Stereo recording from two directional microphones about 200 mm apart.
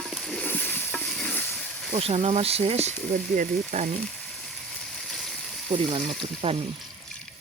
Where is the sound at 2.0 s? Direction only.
30° right (ahead or behind).